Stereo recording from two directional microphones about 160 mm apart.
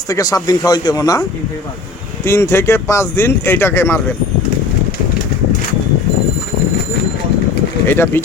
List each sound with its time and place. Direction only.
0.1 s speech: 20° left (ahead or behind)
2.2 s speech: 15° left (ahead or behind)
7.9 s speech: 15° left (ahead or behind)